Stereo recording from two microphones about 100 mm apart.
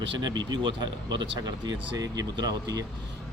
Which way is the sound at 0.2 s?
45° right (ahead or behind).